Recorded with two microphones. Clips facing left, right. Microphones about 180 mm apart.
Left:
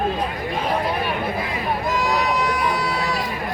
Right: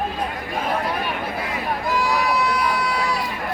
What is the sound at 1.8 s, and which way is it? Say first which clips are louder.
Run: right 1 dB; 20° left (ahead or behind).